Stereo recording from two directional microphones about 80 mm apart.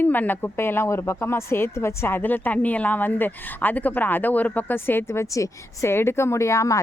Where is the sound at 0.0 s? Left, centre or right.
Left.